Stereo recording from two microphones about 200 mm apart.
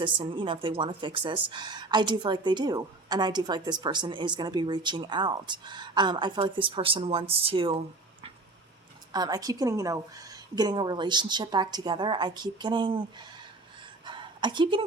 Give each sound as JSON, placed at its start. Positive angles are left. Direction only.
{"t": 0.0, "sound": "a woman's voice", "side_deg": -25}
{"t": 9.1, "sound": "a woman's voice", "side_deg": -20}
{"t": 14.0, "sound": "a sound", "side_deg": -25}